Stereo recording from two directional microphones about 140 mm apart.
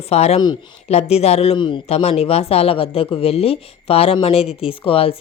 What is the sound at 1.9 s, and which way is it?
A woman's voice, 45° left (ahead or behind).